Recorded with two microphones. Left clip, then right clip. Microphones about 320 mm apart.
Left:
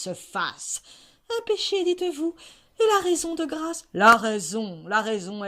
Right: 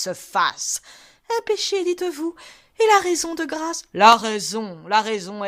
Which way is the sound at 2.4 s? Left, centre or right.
Centre.